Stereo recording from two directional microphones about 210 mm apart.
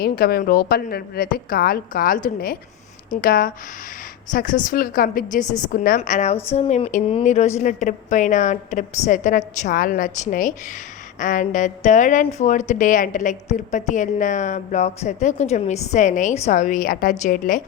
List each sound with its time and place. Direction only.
0.0 s a woman's voice: 45° left (ahead or behind)